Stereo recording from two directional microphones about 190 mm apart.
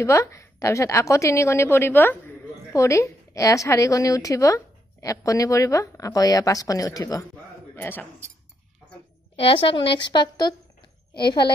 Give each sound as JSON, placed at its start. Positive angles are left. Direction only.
{"t": 0.0, "sound": "a woman's voice", "side_deg": 15}
{"t": 9.4, "sound": "a woman's voice", "side_deg": 30}